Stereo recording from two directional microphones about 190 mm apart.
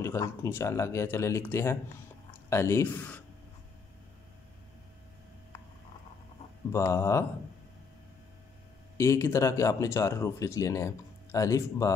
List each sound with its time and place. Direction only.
0.0 s speech: 15° left (ahead or behind)
6.7 s speech: 15° left (ahead or behind)
8.9 s speech: 15° left (ahead or behind)